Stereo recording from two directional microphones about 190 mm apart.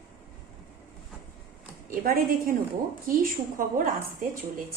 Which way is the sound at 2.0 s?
50° right (ahead or behind).